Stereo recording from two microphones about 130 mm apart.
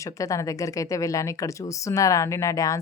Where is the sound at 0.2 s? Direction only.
25° left (ahead or behind).